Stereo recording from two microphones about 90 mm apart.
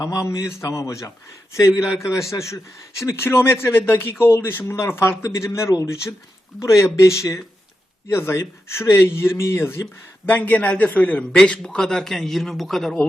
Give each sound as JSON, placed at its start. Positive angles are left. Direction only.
{"t": 0.0, "sound": "a man's voice", "side_deg": 40}